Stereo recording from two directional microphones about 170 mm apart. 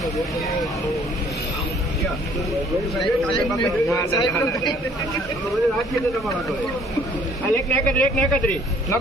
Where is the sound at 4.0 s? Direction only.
20° left (ahead or behind).